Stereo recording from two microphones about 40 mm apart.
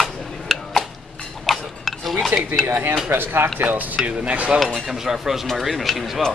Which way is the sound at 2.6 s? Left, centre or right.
Right.